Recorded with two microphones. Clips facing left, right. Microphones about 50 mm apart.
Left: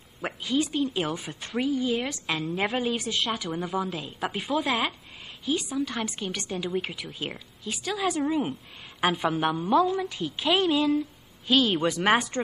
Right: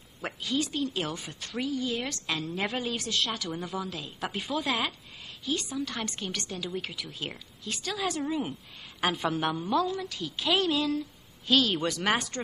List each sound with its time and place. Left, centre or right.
0.2 s a woman's voice: centre